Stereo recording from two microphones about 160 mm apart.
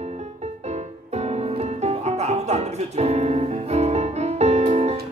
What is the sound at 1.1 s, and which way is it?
Music, 40° right (ahead or behind).